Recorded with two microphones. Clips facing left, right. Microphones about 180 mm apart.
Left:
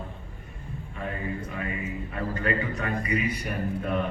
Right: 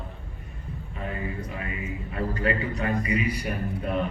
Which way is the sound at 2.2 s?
35° right (ahead or behind).